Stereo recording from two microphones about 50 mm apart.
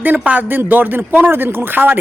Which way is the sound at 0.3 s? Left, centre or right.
Right.